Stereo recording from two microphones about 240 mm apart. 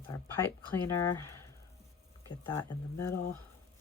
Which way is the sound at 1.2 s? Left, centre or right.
Centre.